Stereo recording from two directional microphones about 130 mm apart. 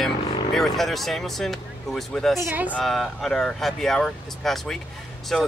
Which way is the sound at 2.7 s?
5° left (ahead or behind).